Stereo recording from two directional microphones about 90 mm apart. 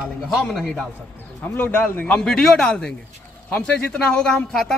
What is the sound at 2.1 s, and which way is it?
A man's voice, 5° left (ahead or behind).